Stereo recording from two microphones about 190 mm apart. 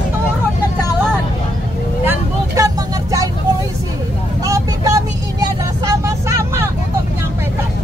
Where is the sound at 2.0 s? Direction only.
15° right (ahead or behind).